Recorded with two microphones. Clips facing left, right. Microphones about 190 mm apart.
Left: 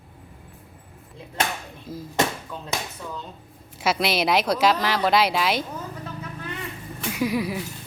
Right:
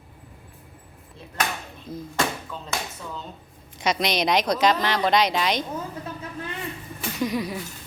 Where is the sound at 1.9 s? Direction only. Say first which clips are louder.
Even; 5° left (ahead or behind).